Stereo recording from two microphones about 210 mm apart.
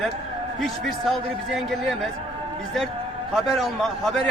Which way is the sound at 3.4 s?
Centre (ahead or behind).